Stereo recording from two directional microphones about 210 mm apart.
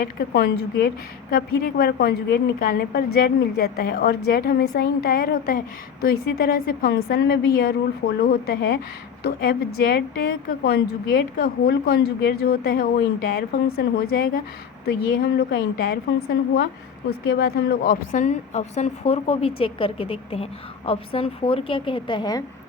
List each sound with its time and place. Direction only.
0.0 s a woman's voice: 45° left (ahead or behind)
17.1 s a woman's voice: 50° left (ahead or behind); by 22.4 s 20° left (ahead or behind)